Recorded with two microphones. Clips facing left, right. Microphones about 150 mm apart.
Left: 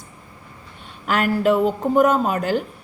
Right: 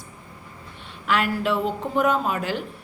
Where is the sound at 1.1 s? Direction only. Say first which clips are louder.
Left 5 dB; 45° left (ahead or behind).